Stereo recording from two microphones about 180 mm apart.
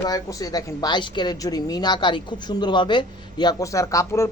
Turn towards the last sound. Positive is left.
turn(degrees=15)  # may be behind; listen again after turning